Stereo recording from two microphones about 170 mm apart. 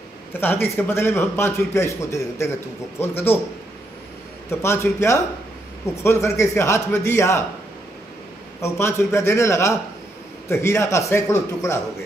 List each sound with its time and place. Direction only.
0.4 s a man's voice: 10° left (ahead or behind)
4.5 s a man's voice: 15° left (ahead or behind)
8.5 s a man's voice: 15° left (ahead or behind)